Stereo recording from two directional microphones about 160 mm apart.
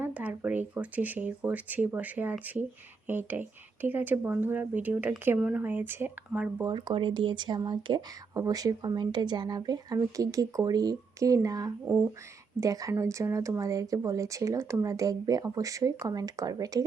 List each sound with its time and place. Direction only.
0.0 s speech: 10° right (ahead or behind)
6.7 s speech: 30° right (ahead or behind)